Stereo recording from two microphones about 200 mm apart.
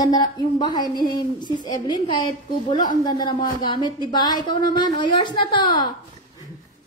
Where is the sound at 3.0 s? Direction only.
20° left (ahead or behind).